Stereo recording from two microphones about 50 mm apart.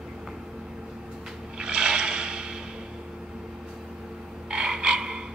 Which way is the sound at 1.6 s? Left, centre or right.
Centre.